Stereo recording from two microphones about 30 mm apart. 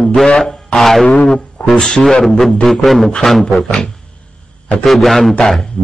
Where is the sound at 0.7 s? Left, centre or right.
Centre.